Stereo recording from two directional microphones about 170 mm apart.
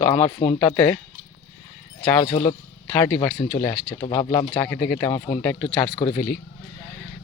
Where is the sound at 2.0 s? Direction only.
25° left (ahead or behind).